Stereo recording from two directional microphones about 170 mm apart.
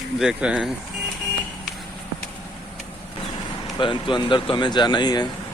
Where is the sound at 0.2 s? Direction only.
5° right (ahead or behind).